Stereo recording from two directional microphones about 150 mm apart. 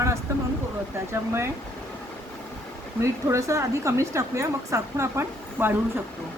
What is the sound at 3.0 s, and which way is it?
A woman's voice, 20° right (ahead or behind).